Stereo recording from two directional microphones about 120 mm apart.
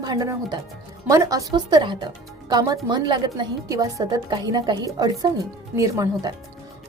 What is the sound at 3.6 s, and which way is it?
A woman's voice, 30° right (ahead or behind).